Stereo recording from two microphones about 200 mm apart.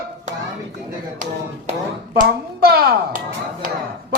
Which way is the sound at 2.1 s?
50° right (ahead or behind).